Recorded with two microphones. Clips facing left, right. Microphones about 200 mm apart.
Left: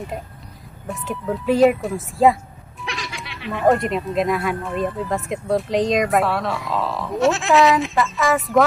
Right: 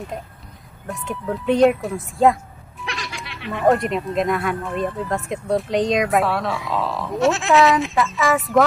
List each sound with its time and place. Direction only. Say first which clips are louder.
0.8 s speech: left 1 dB; centre (ahead or behind)